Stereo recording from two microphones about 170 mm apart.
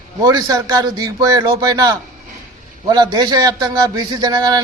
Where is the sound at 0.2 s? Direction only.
20° right (ahead or behind).